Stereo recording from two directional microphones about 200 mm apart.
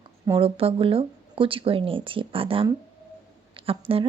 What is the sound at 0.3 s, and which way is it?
A woman's voice, 25° right (ahead or behind).